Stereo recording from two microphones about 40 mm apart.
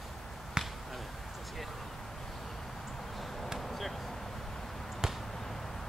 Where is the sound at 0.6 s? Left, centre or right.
Centre.